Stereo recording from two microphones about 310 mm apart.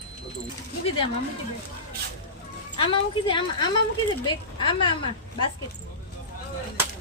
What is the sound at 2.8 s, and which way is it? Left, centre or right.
Speech, centre.